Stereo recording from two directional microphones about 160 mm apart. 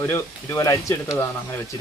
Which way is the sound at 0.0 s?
15° left (ahead or behind).